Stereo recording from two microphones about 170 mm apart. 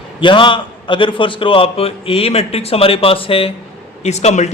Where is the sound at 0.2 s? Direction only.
30° left (ahead or behind).